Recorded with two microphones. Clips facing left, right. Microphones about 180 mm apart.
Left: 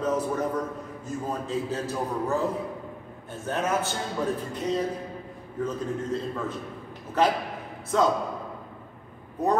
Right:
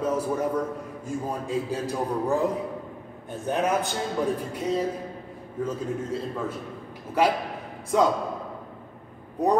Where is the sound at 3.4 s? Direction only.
15° right (ahead or behind).